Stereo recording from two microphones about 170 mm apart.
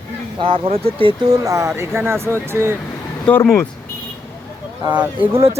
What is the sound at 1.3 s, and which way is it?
Speech, 20° right (ahead or behind).